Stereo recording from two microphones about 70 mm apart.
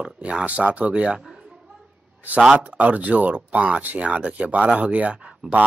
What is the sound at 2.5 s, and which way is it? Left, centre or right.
Speech, centre.